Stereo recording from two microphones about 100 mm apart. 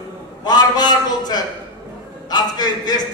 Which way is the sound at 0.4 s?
45° left (ahead or behind).